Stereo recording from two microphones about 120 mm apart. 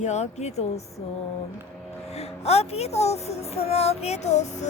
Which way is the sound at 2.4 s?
60° left (ahead or behind).